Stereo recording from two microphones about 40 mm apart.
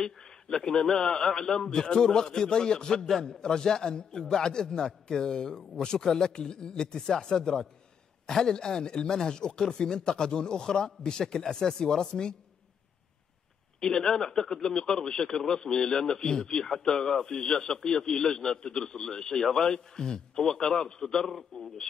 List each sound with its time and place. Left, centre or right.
0.0 s a man's voice: centre
13.7 s a man's voice: centre